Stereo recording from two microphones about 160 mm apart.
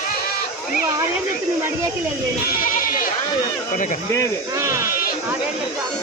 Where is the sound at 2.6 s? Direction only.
60° left (ahead or behind).